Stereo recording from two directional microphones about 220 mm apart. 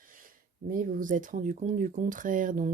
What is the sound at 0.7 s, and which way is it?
Speech, 40° right (ahead or behind).